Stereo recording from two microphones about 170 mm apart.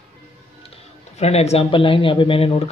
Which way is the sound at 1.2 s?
40° left (ahead or behind).